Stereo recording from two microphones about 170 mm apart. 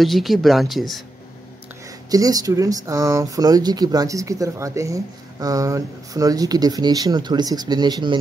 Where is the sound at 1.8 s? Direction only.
20° right (ahead or behind).